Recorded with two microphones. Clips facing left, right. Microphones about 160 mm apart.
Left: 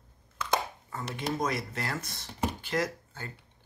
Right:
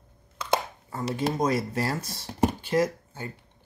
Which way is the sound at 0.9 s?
35° right (ahead or behind).